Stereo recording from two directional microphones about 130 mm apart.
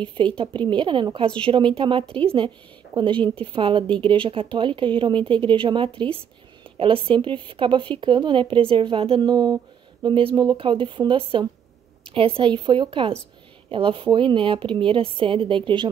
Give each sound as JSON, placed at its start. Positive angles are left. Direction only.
{"t": 0.4, "sound": "speech", "side_deg": -40}
{"t": 2.9, "sound": "speech", "side_deg": -30}